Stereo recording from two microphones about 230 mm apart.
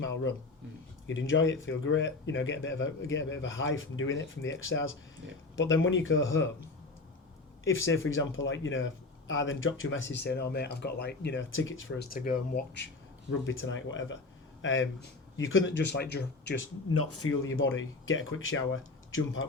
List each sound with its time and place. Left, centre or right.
0.0 s speech: left
7.9 s speech: left
12.1 s speech: left
13.4 s speech: left
16.9 s speech: left